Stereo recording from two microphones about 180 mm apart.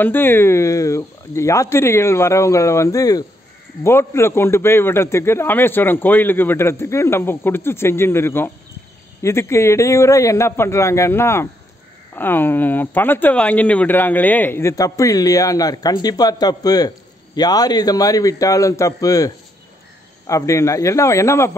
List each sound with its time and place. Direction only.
0.0 s a man's voice: 10° left (ahead or behind)